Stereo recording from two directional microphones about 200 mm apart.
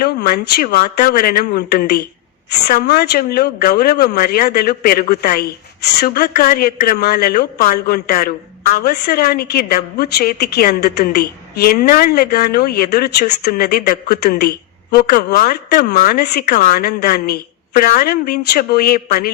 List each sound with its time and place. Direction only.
0.0 s speech: 50° left (ahead or behind)